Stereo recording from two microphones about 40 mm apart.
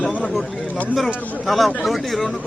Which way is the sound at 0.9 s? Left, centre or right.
Centre.